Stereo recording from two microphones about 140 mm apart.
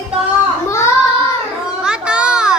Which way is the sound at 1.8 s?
5° right (ahead or behind).